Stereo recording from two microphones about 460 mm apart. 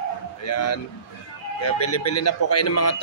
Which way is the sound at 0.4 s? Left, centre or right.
Left.